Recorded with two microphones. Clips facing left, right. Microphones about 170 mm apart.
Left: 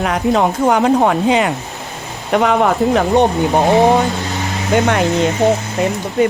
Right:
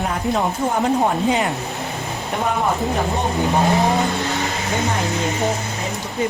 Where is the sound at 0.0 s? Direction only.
85° left.